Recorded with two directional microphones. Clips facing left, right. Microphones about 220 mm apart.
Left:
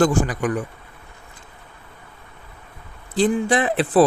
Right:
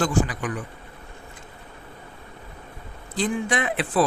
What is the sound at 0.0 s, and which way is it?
Speech, 45° left (ahead or behind).